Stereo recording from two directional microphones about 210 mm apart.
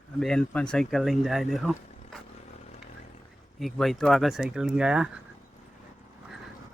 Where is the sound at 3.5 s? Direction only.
Centre (ahead or behind).